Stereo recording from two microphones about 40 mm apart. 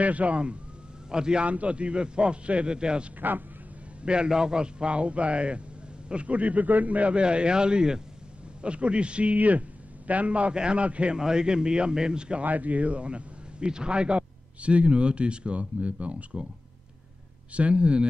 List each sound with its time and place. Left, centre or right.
0.0 s a man's voice: right
1.5 s a man's voice: right
3.2 s speech: right
4.0 s a man's voice: right
11.1 s a man's voice: centre
12.4 s a man's voice: right
17.6 s a man's voice: right